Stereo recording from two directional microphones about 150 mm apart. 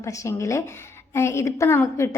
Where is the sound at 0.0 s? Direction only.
20° left (ahead or behind).